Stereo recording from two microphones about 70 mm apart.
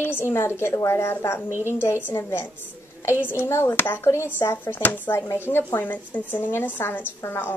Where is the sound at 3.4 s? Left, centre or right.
Left.